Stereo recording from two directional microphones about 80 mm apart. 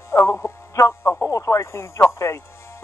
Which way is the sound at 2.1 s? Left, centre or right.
Left.